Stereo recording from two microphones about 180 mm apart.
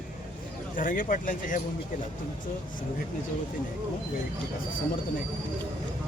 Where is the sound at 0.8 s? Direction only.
50° left (ahead or behind).